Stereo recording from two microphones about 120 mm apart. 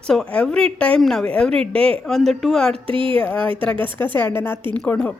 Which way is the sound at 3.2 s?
10° left (ahead or behind).